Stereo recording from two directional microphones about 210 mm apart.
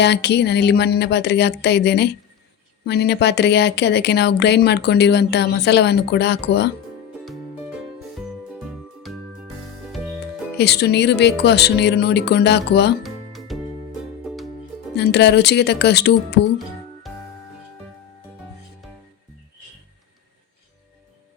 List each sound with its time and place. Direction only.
0.0 s speech: 55° left (ahead or behind)
7.3 s music: 5° right (ahead or behind)
10.6 s speech: 50° left (ahead or behind)
13.0 s music: centre (ahead or behind)
14.9 s speech: 55° left (ahead or behind)